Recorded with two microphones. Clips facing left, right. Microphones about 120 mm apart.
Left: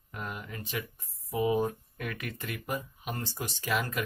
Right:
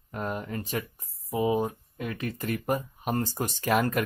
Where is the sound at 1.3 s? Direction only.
25° right (ahead or behind); by 4.0 s 50° right (ahead or behind).